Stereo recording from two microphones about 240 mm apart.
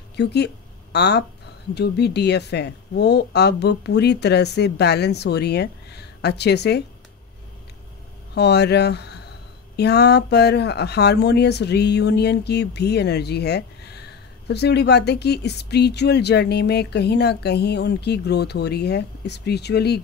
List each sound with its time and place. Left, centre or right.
0.1 s a woman's voice: left
8.4 s speech: left